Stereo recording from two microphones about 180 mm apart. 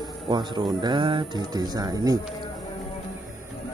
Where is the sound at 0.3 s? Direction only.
25° right (ahead or behind).